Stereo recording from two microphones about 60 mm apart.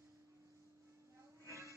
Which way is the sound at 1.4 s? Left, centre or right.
Right.